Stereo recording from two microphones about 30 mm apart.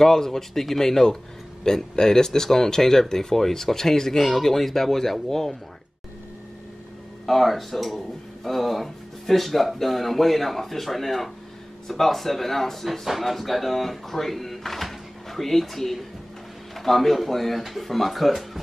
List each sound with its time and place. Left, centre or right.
0.0 s speech: centre
7.2 s speech: centre
13.0 s speech: centre